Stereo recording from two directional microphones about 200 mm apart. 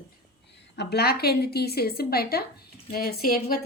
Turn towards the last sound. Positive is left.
turn(degrees=50)  # may be behind; listen again after turning